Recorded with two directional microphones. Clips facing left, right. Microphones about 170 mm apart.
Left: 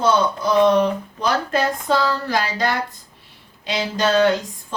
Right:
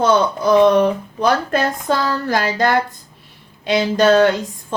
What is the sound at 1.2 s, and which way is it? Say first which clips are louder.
Speech: right 3 dB; 55° right (ahead or behind).